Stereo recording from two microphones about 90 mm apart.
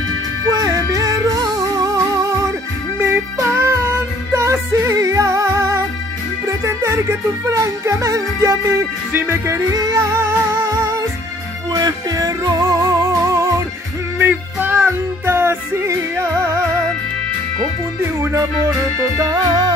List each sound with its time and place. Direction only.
0.5 s music: 40° right (ahead or behind)
9.1 s music: 25° right (ahead or behind)
9.7 s music: 40° right (ahead or behind)
14.1 s music: 20° right (ahead or behind)
18.2 s music: 35° right (ahead or behind)